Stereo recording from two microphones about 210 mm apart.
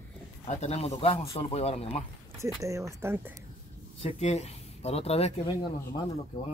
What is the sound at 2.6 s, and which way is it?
Speech, 15° right (ahead or behind).